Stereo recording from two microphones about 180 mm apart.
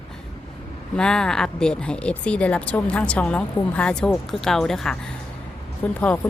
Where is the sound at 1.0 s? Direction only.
5° left (ahead or behind).